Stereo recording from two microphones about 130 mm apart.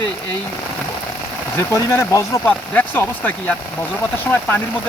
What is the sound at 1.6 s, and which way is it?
Speech, 20° left (ahead or behind).